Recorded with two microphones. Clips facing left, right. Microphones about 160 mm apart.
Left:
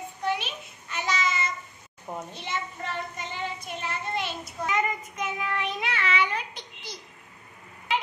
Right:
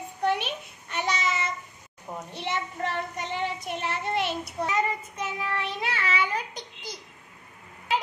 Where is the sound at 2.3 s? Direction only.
65° right (ahead or behind).